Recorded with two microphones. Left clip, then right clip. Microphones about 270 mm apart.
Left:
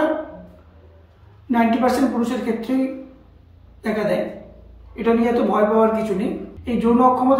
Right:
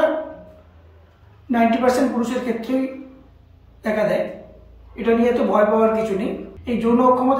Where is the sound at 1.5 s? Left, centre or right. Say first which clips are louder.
Right 1 dB; centre.